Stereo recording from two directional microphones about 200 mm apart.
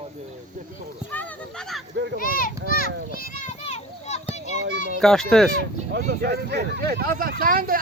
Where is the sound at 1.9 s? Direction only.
60° right (ahead or behind).